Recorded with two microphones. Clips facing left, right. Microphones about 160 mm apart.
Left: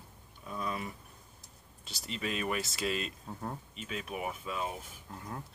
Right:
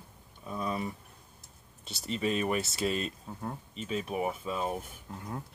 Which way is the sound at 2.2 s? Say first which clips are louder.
Right 5 dB; 40° right (ahead or behind).